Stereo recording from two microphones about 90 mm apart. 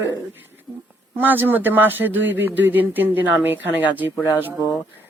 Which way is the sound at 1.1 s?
20° right (ahead or behind).